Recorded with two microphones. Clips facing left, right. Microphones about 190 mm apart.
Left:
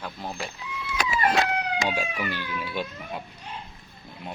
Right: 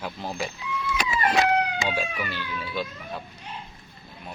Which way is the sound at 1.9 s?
10° left (ahead or behind).